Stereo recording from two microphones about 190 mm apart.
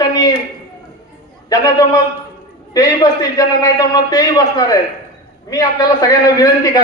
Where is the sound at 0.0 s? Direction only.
20° left (ahead or behind).